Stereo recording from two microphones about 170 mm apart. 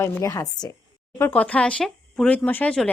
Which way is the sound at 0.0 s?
15° left (ahead or behind).